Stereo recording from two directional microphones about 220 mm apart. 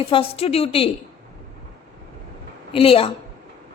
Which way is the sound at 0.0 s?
25° left (ahead or behind).